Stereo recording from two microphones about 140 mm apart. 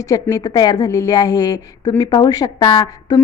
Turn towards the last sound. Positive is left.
turn(degrees=35)  # may be behind; listen again after turning